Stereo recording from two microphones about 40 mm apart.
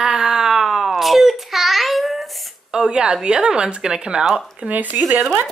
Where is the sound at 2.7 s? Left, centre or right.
Centre.